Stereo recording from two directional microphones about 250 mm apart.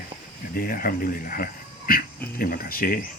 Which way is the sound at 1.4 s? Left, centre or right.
Left.